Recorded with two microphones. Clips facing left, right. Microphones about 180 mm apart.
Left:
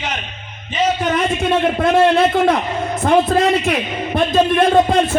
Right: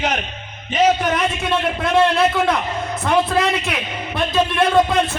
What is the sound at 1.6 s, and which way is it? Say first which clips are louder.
A man's voice: left 3 dB; 45° left (ahead or behind).